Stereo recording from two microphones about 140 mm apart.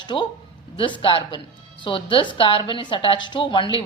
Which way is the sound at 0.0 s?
35° left (ahead or behind).